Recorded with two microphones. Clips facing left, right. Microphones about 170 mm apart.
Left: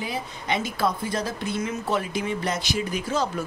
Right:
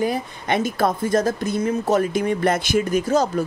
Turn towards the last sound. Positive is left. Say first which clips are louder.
# right 7 dB
turn(degrees=-40)  # may be behind; listen again after turning